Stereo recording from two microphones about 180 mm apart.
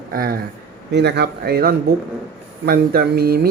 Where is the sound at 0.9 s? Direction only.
70° right (ahead or behind).